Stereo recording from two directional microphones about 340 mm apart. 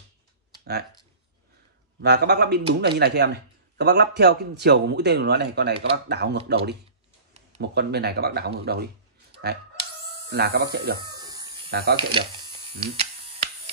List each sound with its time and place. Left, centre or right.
2.0 s speech: right
9.3 s chicken: right
10.3 s speech: right
11.0 s electric shaver: centre
11.7 s speech: right
12.0 s speech: centre